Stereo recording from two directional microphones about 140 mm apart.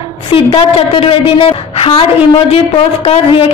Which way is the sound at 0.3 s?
35° left (ahead or behind).